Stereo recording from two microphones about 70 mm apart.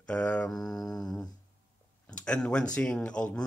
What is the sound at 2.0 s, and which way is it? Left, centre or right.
Speech, centre.